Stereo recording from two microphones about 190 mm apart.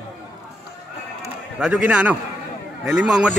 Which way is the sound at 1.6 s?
5° right (ahead or behind).